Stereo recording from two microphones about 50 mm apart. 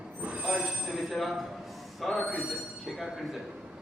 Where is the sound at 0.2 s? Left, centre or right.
Right.